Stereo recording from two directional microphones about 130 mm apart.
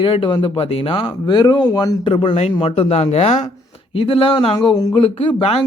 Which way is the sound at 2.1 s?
45° left (ahead or behind).